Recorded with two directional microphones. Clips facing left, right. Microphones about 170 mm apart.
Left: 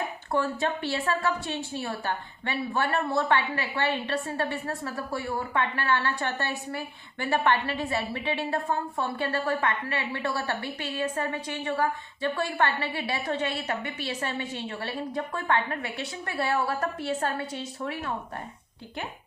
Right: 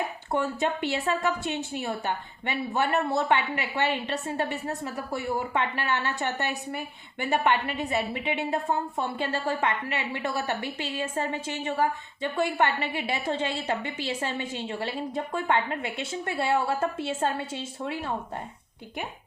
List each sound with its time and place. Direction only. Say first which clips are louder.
0.3 s a woman's voice: even; 20° right (ahead or behind)